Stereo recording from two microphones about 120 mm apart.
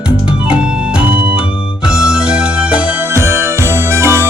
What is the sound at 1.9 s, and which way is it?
Music, 5° right (ahead or behind).